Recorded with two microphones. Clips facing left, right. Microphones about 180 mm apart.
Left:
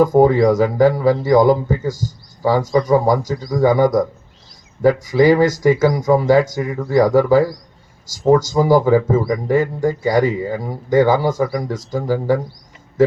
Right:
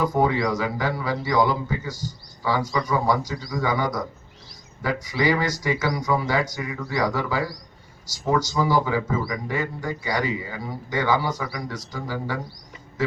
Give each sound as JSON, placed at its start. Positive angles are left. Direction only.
{"t": 0.0, "sound": "a man's voice", "side_deg": 45}